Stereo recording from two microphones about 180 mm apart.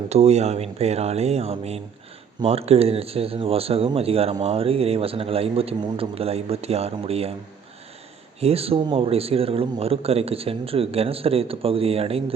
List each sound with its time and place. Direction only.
0.1 s speech: 35° right (ahead or behind)
8.4 s speech: 35° right (ahead or behind)